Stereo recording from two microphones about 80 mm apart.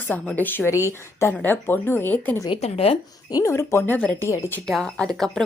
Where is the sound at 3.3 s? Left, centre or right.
Left.